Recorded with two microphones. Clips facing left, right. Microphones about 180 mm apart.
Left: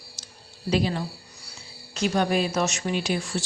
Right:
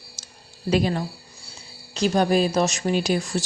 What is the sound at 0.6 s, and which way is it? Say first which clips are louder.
Speech: right 3 dB; 50° right (ahead or behind).